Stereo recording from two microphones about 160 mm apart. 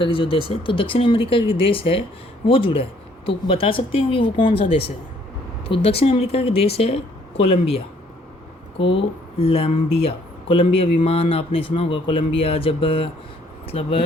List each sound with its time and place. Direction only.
0.0 s speech: 35° left (ahead or behind)
8.8 s speech: 35° left (ahead or behind)